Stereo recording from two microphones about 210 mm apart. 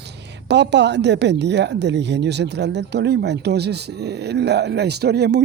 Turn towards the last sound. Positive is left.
turn(degrees=-50)  # may be behind; listen again after turning